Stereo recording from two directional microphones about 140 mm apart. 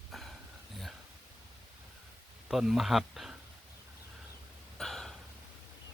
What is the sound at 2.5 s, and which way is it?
Speech, centre (ahead or behind).